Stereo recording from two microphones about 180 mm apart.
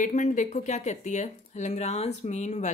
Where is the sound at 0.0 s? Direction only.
45° left (ahead or behind).